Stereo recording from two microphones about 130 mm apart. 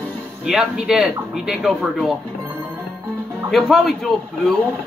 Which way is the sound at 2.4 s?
15° right (ahead or behind).